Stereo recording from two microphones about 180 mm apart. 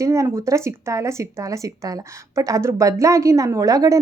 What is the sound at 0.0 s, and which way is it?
Speech, 15° right (ahead or behind).